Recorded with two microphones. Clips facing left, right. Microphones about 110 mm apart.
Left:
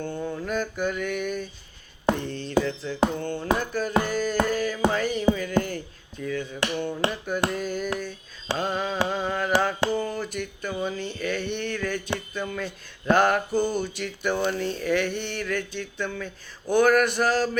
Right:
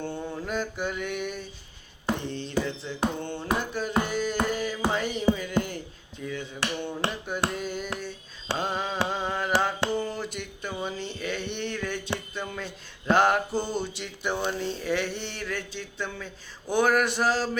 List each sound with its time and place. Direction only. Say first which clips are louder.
0.0 s mantra: left 3 dB; 25° right (ahead or behind)
2.2 s music: left 4 dB; 20° right (ahead or behind)
6.2 s speech: left 4 dB; 20° right (ahead or behind)
8.5 s mantra: left 2 dB; 20° right (ahead or behind)
12.3 s speech: left 4 dB; 25° right (ahead or behind)